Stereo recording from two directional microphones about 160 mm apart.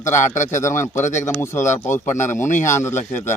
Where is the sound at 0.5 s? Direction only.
15° left (ahead or behind).